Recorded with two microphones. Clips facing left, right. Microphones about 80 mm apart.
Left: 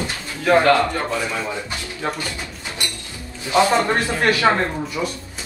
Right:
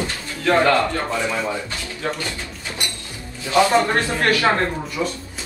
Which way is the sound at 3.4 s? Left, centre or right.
Left.